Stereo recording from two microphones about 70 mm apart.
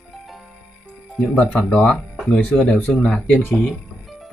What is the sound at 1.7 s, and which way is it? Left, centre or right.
Speech, centre.